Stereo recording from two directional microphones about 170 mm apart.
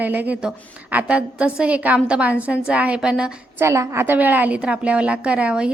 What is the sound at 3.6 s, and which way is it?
A woman's voice, 15° right (ahead or behind).